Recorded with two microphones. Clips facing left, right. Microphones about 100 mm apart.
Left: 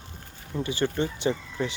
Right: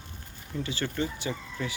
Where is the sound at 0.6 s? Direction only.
20° left (ahead or behind).